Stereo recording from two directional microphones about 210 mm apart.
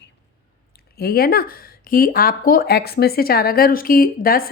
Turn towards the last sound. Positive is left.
turn(degrees=45)  # may be behind; listen again after turning